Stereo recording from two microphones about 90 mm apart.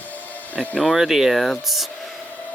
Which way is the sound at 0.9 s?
Centre (ahead or behind).